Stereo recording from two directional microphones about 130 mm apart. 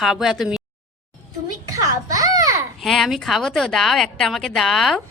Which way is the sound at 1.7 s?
25° right (ahead or behind).